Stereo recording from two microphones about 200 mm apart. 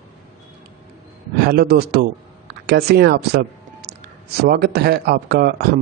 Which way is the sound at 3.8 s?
50° right (ahead or behind).